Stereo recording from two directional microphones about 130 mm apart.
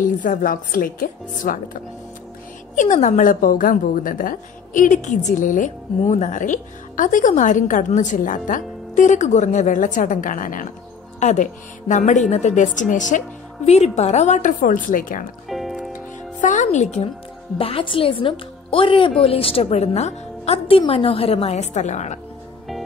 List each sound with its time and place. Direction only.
0.0 s speech: 90° left
2.7 s a woman's voice: 75° left (ahead or behind); by 10.7 s 90° left
11.1 s a woman's voice: 65° left (ahead or behind)
13.7 s a woman's voice: 55° left (ahead or behind); by 15.2 s 90° left
15.4 s music: centre (ahead or behind)
15.9 s music: 75° left (ahead or behind)
17.6 s a woman's voice: 45° left (ahead or behind); by 22.2 s 60° left (ahead or behind)